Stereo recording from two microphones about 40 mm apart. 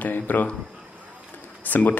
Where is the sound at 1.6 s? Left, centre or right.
Left.